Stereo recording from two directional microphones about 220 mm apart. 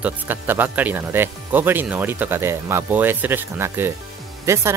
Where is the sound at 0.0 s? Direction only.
10° right (ahead or behind).